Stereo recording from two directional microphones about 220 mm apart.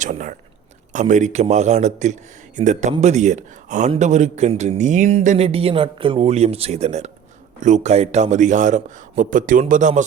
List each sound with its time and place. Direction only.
0.0 s whispering: 35° right (ahead or behind)
0.9 s a man's voice: 35° right (ahead or behind)